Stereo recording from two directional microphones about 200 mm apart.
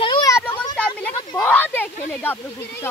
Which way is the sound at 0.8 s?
5° left (ahead or behind).